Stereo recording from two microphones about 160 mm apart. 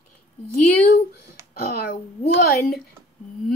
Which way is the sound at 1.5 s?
70° left (ahead or behind).